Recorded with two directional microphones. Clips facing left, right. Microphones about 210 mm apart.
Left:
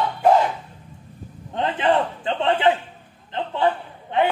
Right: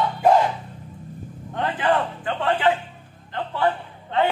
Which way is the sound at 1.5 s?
20° left (ahead or behind).